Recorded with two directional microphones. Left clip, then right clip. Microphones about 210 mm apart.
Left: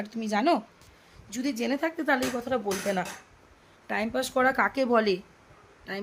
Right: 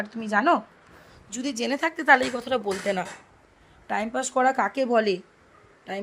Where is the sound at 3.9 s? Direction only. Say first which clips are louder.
Right 2 dB; centre (ahead or behind).